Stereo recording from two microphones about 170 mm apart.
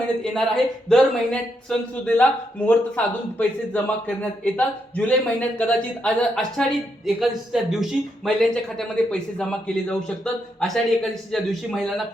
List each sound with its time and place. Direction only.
0.2 s a man's voice: centre (ahead or behind)